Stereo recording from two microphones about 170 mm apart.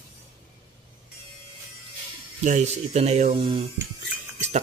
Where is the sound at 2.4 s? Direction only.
45° right (ahead or behind).